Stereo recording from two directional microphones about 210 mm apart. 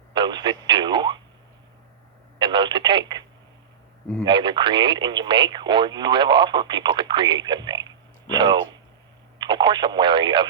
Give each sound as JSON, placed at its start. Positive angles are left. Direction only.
{"t": 0.1, "sound": "radio", "side_deg": -20}
{"t": 2.4, "sound": "telephone", "side_deg": -20}
{"t": 4.2, "sound": "speech", "side_deg": -20}